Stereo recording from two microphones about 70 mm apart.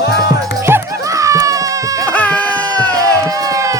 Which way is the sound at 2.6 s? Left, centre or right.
Right.